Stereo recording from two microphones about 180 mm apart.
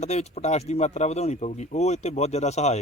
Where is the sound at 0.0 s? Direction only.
40° left (ahead or behind).